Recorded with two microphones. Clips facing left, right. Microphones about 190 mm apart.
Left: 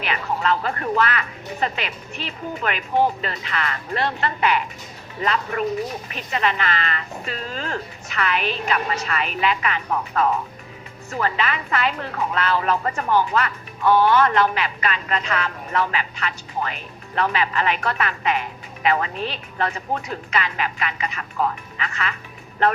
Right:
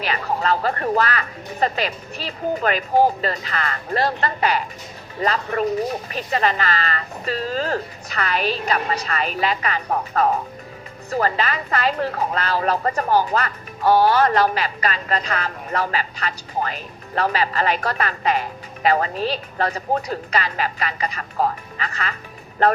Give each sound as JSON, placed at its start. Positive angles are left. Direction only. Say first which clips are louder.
{"t": 0.0, "sound": "a woman's voice", "louder": "right 1 dB", "side_deg": -40}